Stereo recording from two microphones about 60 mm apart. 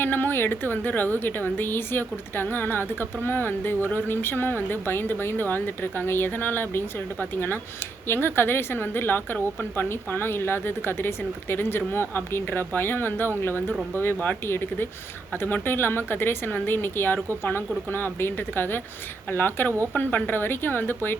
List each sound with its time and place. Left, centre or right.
0.0 s a woman's voice: left